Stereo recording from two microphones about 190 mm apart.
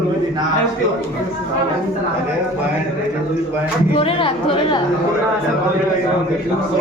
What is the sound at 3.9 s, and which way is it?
Speech, 30° left (ahead or behind).